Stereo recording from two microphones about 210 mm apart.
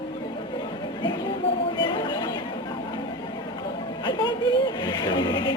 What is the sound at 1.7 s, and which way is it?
Chatter, 20° left (ahead or behind).